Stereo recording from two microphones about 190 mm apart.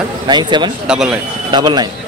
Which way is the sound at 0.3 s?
25° right (ahead or behind).